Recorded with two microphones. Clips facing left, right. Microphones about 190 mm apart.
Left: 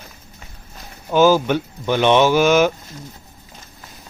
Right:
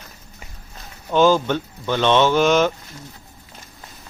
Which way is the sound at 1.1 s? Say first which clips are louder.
Left 2 dB; 5° left (ahead or behind).